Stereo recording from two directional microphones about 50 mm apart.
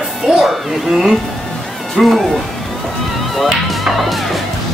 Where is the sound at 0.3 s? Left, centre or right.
Centre.